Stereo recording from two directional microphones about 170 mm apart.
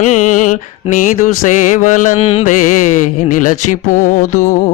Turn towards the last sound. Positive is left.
turn(degrees=50)  # may be behind; listen again after turning